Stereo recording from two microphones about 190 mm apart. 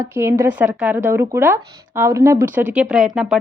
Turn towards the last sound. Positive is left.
turn(degrees=-5)  # may be behind; listen again after turning